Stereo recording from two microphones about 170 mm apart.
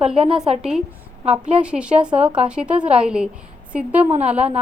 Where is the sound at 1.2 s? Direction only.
35° right (ahead or behind).